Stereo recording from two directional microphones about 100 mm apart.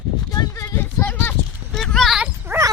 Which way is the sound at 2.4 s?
30° right (ahead or behind).